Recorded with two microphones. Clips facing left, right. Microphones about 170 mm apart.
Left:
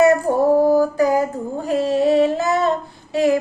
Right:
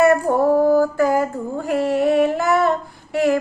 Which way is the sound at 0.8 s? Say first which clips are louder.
Even; 15° left (ahead or behind).